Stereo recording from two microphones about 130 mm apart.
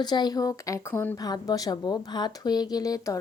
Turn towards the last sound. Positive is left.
turn(degrees=30)  # may be behind; listen again after turning